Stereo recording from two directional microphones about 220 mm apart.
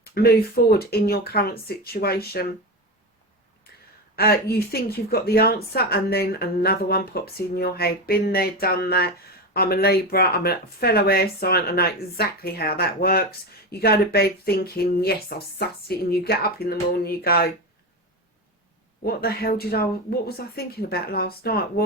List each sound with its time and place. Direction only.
0.0 s speech: 45° left (ahead or behind)
4.1 s speech: 45° left (ahead or behind)
19.0 s speech: 45° left (ahead or behind)